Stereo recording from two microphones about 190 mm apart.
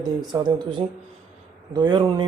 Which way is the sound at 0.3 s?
20° right (ahead or behind).